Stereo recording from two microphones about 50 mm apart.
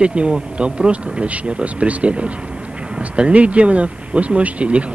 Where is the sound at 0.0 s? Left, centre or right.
Right.